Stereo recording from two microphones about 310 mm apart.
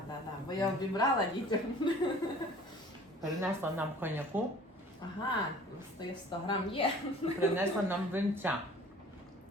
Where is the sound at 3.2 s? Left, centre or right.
Centre.